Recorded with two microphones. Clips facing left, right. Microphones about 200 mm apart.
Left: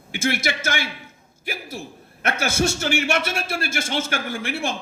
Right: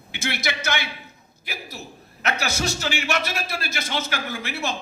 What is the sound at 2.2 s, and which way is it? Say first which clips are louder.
A man's voice: left 4 dB; 50° left (ahead or behind).